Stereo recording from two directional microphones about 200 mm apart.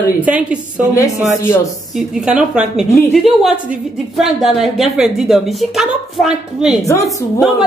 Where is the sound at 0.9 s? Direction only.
15° left (ahead or behind).